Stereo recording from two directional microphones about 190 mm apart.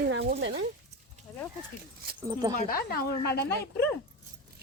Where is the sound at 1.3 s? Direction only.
5° left (ahead or behind).